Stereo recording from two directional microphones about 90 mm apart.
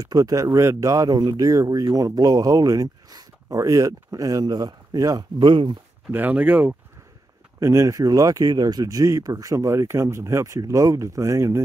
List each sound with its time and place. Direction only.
0.0 s speech: 40° right (ahead or behind); by 5.8 s 60° right (ahead or behind)
6.1 s speech: 20° right (ahead or behind)
7.6 s speech: 35° right (ahead or behind)